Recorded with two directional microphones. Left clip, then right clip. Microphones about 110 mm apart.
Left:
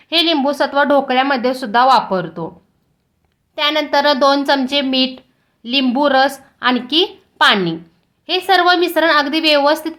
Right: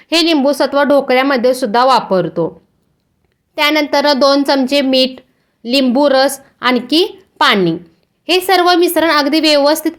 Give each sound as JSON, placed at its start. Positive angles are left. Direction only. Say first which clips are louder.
{"t": 0.0, "sound": "a woman's voice", "louder": "right 3 dB", "side_deg": -45}
{"t": 3.5, "sound": "speech", "louder": "right 3 dB", "side_deg": -40}
{"t": 5.8, "sound": "speech", "louder": "right 2 dB", "side_deg": -30}